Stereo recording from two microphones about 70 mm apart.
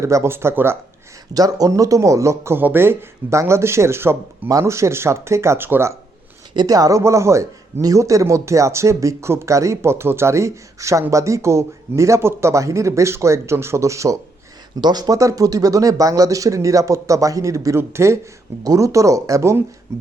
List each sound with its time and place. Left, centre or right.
0.0 s speech: right
1.3 s speech: right
4.4 s speech: right
6.6 s speech: right
7.0 s speech: right
14.8 s speech: right
18.6 s speech: right